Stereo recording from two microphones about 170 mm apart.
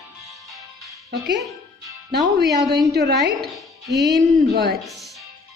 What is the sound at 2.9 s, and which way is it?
Speech, 75° right (ahead or behind).